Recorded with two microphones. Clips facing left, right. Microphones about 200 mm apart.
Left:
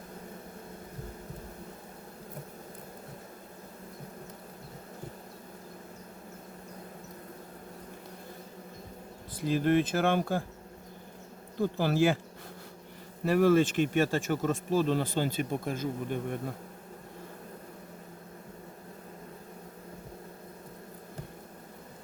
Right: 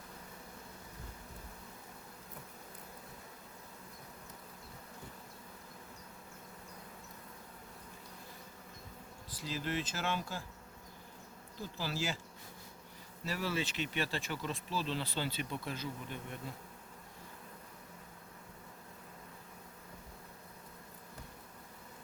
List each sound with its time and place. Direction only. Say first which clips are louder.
9.3 s speech: left 13 dB; 55° left (ahead or behind)
11.5 s speech: left 13 dB; 60° left (ahead or behind)
13.2 s speech: left 14 dB; 55° left (ahead or behind)